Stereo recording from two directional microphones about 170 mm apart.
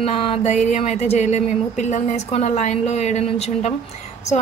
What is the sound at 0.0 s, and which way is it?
A woman's voice, 35° left (ahead or behind).